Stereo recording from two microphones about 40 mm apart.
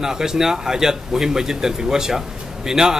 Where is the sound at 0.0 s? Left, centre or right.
Centre.